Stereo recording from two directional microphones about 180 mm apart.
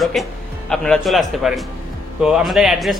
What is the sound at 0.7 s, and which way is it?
A man's voice, centre (ahead or behind).